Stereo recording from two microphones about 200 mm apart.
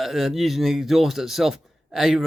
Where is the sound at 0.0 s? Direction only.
Centre (ahead or behind).